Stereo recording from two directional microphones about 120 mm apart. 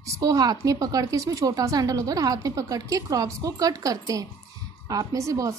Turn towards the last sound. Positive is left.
turn(degrees=-25)  # may be behind; listen again after turning